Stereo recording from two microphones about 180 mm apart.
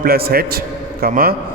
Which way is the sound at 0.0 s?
55° right (ahead or behind).